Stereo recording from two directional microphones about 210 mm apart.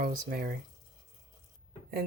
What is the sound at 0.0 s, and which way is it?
Speech, 45° right (ahead or behind).